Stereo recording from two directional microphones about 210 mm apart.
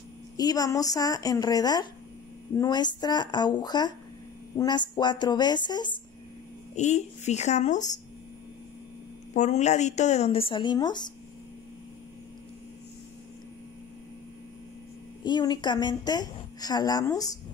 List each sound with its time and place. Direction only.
0.4 s a woman's voice: 15° left (ahead or behind)
6.7 s speech: 30° left (ahead or behind)
9.3 s speech: 35° left (ahead or behind)
15.2 s a woman's voice: 20° left (ahead or behind)